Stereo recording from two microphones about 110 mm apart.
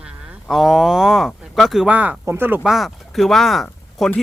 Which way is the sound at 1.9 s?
15° right (ahead or behind).